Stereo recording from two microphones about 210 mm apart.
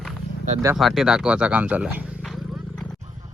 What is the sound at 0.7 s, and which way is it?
Speech, centre (ahead or behind).